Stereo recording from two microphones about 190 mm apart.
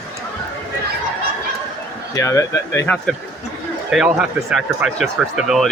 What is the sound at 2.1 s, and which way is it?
Speech, 15° left (ahead or behind).